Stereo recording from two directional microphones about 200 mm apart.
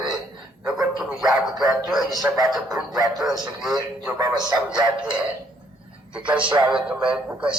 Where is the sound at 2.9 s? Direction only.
20° right (ahead or behind).